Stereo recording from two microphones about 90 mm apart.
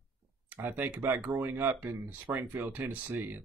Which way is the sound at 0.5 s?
20° right (ahead or behind).